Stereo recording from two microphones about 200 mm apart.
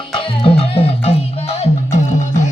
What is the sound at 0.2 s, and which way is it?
Music, 30° left (ahead or behind).